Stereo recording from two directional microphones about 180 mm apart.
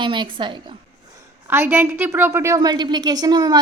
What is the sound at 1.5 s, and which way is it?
A woman's voice, 10° right (ahead or behind).